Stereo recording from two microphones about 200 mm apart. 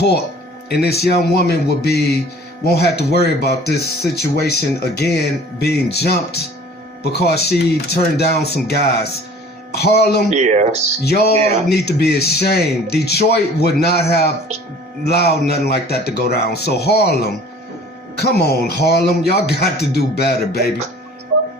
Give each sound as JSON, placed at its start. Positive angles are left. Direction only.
{"t": 0.7, "sound": "speech", "side_deg": 55}
{"t": 10.2, "sound": "speech", "side_deg": -35}
{"t": 11.0, "sound": "speech", "side_deg": 50}
{"t": 18.2, "sound": "speech", "side_deg": 55}